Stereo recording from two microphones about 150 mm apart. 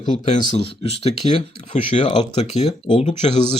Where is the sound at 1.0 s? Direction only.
45° left (ahead or behind).